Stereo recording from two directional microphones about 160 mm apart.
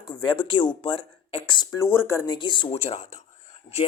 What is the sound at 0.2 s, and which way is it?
Speech, 30° left (ahead or behind).